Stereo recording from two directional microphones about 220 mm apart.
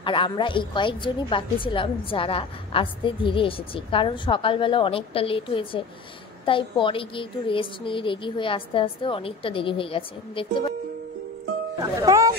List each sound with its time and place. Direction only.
0.0 s a woman's voice: 25° left (ahead or behind)
11.8 s speech: 15° right (ahead or behind)